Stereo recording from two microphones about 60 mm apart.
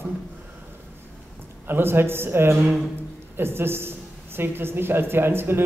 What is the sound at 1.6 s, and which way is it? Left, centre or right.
A man's voice, right.